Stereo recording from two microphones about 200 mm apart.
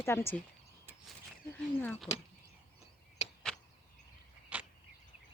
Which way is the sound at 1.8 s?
10° left (ahead or behind).